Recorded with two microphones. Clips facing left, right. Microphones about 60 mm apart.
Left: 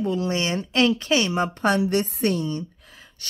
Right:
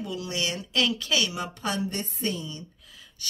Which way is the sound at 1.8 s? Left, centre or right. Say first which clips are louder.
Left 9 dB; left.